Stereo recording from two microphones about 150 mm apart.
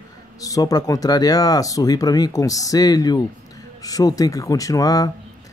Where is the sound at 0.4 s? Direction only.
25° left (ahead or behind).